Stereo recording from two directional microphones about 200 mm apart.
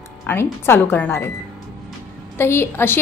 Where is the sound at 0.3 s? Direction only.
10° left (ahead or behind).